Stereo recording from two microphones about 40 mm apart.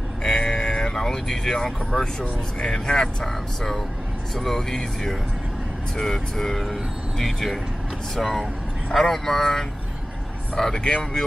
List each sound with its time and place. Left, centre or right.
0.2 s vehicle: left
2.6 s speech: centre
4.4 s speech: centre